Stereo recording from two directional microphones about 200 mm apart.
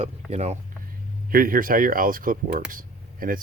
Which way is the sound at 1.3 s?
45° right (ahead or behind).